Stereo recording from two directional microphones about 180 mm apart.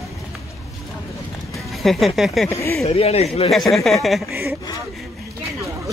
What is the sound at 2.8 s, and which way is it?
Speech, 35° left (ahead or behind).